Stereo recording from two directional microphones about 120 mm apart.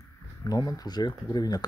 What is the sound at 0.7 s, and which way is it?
Speech, 35° left (ahead or behind).